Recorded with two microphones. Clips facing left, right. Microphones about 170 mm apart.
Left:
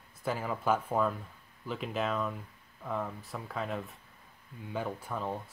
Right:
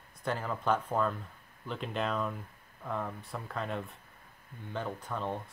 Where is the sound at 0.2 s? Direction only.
5° left (ahead or behind).